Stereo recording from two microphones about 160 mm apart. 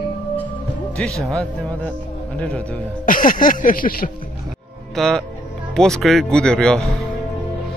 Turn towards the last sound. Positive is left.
turn(degrees=5)  # may be behind; listen again after turning